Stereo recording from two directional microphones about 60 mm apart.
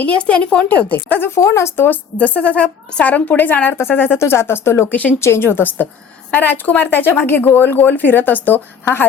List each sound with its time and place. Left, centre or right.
0.0 s a woman's voice: centre
1.4 s speech: left
1.7 s speech: left
2.1 s a woman's voice: left
4.2 s speech: left
4.9 s a woman's voice: left
5.2 s speech: left
8.8 s speech: left